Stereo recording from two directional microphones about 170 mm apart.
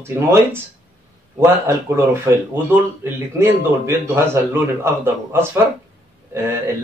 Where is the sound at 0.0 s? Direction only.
15° right (ahead or behind).